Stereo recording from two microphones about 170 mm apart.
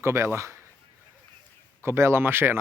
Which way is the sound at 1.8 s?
15° right (ahead or behind).